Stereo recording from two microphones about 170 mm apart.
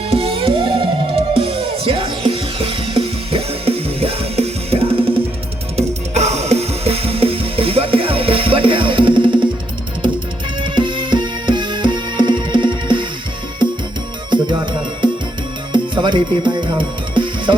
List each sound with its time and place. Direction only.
0.1 s music: 35° right (ahead or behind)
10.6 s music: 30° right (ahead or behind)
14.3 s music: 25° right (ahead or behind)